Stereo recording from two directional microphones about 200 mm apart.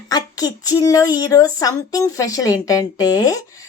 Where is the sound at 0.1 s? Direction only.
20° left (ahead or behind).